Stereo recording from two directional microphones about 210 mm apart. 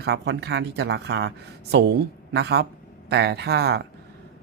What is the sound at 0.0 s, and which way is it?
Speech, 50° right (ahead or behind).